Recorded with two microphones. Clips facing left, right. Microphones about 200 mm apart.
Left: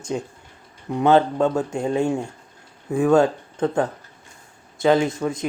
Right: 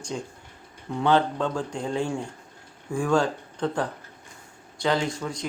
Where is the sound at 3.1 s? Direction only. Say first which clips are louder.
Left 6 dB; 20° left (ahead or behind).